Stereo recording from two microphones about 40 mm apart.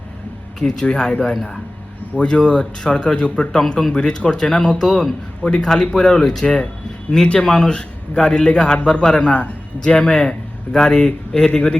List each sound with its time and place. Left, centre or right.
0.6 s a man's voice: left